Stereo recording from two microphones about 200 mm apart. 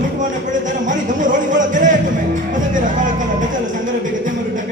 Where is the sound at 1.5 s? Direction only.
40° right (ahead or behind).